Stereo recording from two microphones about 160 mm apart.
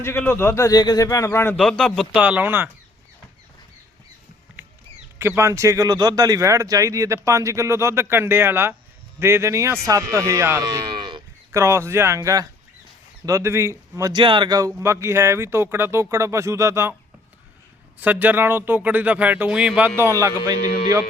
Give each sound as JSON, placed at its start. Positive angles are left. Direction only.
{"t": 0.0, "sound": "a man's voice", "side_deg": 15}
{"t": 1.6, "sound": "speech", "side_deg": 5}
{"t": 5.2, "sound": "a man's voice", "side_deg": -15}
{"t": 11.6, "sound": "a man's voice", "side_deg": -15}
{"t": 18.0, "sound": "a man's voice", "side_deg": -10}
{"t": 20.0, "sound": "a man's voice", "side_deg": -15}